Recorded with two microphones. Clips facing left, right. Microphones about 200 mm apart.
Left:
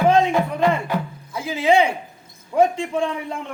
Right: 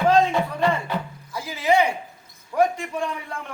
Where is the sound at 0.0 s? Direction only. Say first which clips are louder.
Left 2 dB; 15° left (ahead or behind).